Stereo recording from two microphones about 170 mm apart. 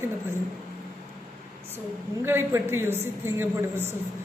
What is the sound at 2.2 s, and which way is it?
A woman's voice, 15° right (ahead or behind).